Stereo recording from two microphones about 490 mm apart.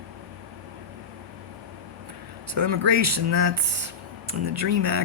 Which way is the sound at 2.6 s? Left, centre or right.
Right.